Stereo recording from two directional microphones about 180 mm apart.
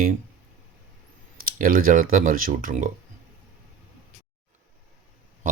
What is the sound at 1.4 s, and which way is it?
Speech, 50° right (ahead or behind).